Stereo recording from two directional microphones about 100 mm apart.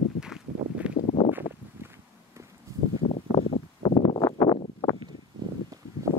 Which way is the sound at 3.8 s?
55° left (ahead or behind).